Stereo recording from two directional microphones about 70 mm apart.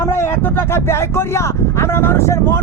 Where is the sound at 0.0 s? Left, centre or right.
Left.